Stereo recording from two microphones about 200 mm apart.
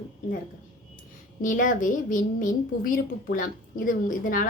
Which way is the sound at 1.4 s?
40° left (ahead or behind).